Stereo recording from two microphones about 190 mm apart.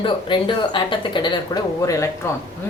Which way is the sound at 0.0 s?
25° left (ahead or behind).